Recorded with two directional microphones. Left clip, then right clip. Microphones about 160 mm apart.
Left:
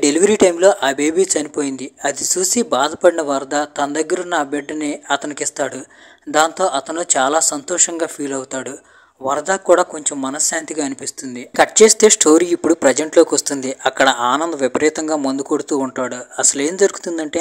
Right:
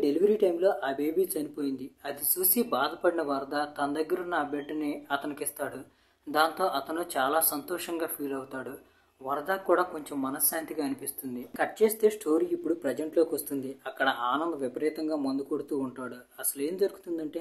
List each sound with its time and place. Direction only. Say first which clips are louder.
0.0 s speech: left 12 dB; 50° left (ahead or behind)